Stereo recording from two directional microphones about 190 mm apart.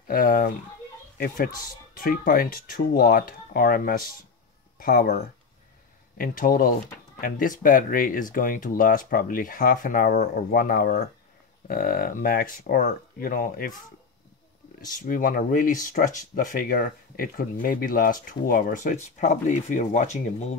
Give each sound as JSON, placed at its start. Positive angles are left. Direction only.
{"t": 0.1, "sound": "speech", "side_deg": 50}
{"t": 6.1, "sound": "speech", "side_deg": 45}
{"t": 15.0, "sound": "speech", "side_deg": 45}